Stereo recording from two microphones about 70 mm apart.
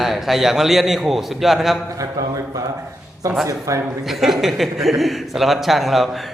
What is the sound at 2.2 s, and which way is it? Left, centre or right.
Speech, right.